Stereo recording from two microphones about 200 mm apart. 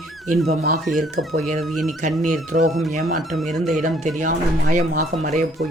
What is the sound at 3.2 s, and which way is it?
Speech, centre (ahead or behind).